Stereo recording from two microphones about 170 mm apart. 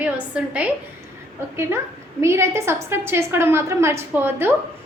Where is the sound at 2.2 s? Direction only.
15° right (ahead or behind).